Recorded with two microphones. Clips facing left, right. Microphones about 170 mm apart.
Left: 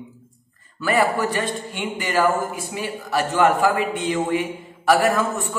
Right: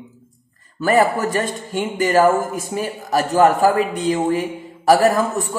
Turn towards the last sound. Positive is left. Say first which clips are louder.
# right 4 dB
turn(degrees=-35)  # may be behind; listen again after turning